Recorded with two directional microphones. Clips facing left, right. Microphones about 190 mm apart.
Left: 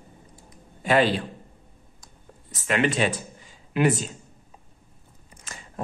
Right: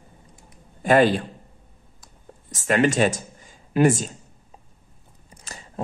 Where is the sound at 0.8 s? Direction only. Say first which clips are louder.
Right 4 dB; 45° right (ahead or behind).